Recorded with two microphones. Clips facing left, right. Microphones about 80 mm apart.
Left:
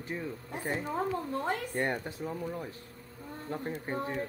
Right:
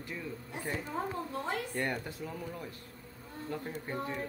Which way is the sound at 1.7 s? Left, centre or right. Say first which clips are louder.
Left 3 dB; left.